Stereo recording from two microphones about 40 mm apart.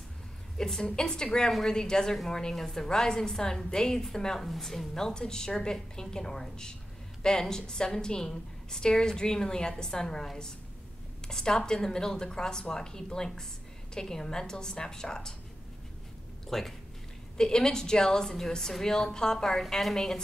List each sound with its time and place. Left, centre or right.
0.6 s a woman's voice: centre
16.4 s speech: centre
17.4 s a woman's voice: centre